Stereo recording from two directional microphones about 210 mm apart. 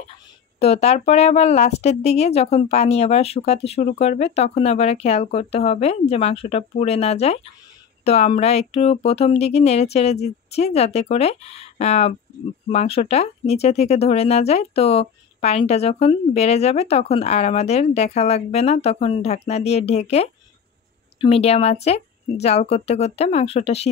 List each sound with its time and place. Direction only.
0.6 s speech: 30° left (ahead or behind)